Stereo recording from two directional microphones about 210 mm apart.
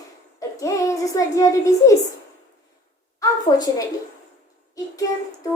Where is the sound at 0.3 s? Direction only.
15° left (ahead or behind).